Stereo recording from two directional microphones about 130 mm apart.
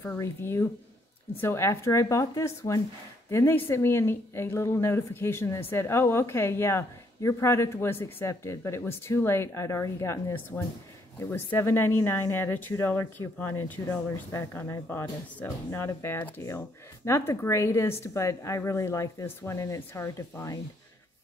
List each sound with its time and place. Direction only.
0.2 s speech: 20° left (ahead or behind)